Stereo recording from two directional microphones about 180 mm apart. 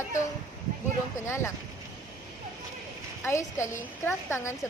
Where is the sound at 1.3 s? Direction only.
15° left (ahead or behind).